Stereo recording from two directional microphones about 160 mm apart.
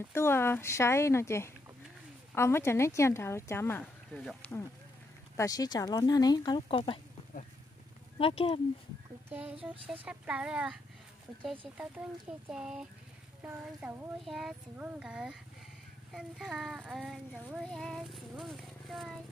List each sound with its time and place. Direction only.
0.1 s speech: 15° left (ahead or behind)
5.3 s speech: 20° left (ahead or behind)
8.2 s speech: 35° left (ahead or behind)
10.0 s speech: 5° right (ahead or behind)
17.6 s speech: 5° left (ahead or behind)